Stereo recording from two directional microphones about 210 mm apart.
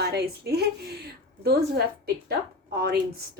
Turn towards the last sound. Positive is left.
turn(degrees=-50)  # may be behind; listen again after turning